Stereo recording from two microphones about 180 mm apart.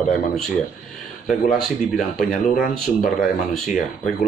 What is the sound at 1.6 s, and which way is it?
Speech, 5° left (ahead or behind).